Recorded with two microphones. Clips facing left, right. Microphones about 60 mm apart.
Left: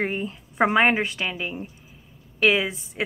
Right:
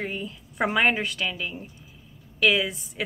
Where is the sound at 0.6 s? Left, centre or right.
Left.